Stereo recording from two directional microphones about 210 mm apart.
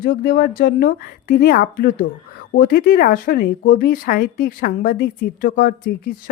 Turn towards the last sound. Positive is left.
turn(degrees=40)  # may be behind; listen again after turning